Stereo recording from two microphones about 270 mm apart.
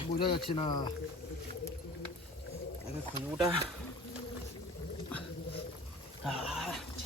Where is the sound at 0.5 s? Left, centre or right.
Centre.